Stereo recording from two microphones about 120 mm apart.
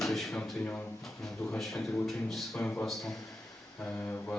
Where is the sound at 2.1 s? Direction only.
Centre (ahead or behind).